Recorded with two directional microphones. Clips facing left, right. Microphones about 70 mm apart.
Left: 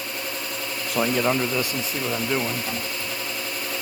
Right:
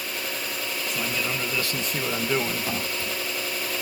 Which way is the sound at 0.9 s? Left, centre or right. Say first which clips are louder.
Left 10 dB; left.